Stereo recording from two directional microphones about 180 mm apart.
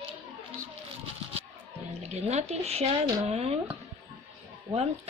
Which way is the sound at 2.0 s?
35° right (ahead or behind).